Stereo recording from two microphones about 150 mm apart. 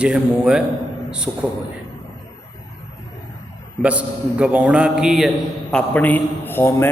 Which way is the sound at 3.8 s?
10° right (ahead or behind).